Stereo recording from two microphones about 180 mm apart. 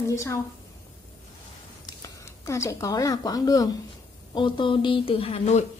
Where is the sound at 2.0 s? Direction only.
15° left (ahead or behind); by 5.6 s 35° left (ahead or behind).